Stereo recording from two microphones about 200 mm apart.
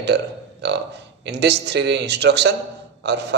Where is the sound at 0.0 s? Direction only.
60° right (ahead or behind).